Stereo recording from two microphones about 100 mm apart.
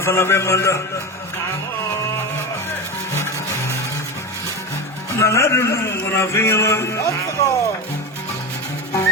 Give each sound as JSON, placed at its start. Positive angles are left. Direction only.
{"t": 0.0, "sound": "a man's voice", "side_deg": 25}
{"t": 5.1, "sound": "a man's voice", "side_deg": 30}